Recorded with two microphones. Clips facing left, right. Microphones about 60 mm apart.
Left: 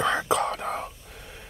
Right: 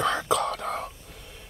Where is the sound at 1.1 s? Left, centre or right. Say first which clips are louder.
Left 2 dB; left.